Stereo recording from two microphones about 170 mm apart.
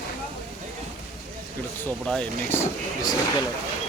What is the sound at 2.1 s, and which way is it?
Speech, 10° left (ahead or behind).